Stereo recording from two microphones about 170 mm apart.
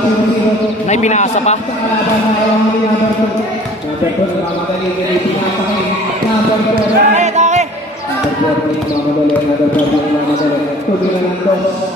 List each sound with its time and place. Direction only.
0.8 s a man's voice: 45° left (ahead or behind)
6.7 s basketball bounce: 40° right (ahead or behind)